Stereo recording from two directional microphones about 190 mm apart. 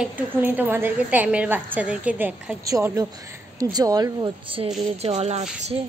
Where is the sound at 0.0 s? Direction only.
10° right (ahead or behind); by 5.4 s 35° right (ahead or behind).